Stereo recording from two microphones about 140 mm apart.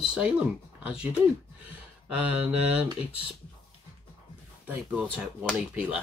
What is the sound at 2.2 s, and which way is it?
Speech, 10° right (ahead or behind).